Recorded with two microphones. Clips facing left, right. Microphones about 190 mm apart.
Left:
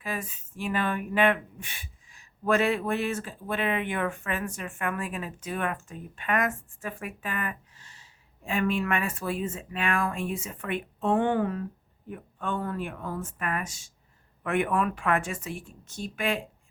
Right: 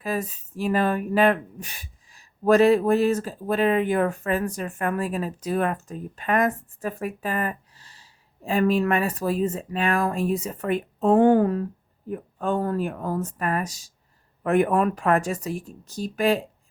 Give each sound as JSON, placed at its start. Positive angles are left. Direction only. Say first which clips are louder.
{"t": 0.0, "sound": "speech", "louder": "right 7 dB", "side_deg": -40}